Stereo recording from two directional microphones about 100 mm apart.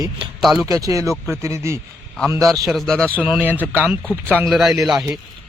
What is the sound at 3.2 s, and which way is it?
Speech, 15° right (ahead or behind).